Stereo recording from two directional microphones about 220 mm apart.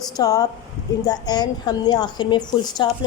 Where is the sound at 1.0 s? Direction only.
20° left (ahead or behind).